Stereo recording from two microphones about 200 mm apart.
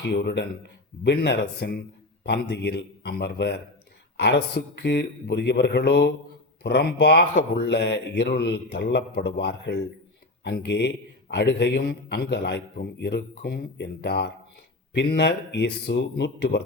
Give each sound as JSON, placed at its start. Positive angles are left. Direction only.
{"t": 0.0, "sound": "a man's voice", "side_deg": 60}